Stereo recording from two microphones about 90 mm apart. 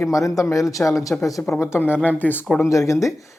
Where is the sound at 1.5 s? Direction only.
25° left (ahead or behind).